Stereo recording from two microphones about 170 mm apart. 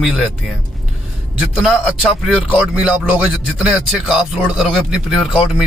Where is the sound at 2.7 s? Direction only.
5° right (ahead or behind).